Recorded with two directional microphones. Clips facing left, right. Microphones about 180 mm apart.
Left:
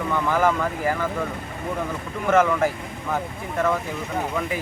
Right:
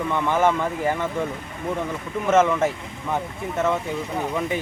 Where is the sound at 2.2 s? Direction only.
25° right (ahead or behind).